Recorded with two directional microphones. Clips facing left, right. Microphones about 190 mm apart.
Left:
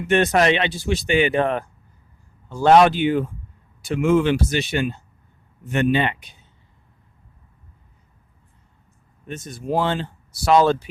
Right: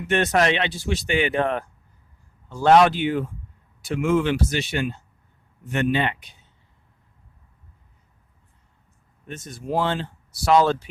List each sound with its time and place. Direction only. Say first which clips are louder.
0.3 s speech: left 3 dB; 15° left (ahead or behind)
9.2 s speech: left 3 dB; 15° left (ahead or behind)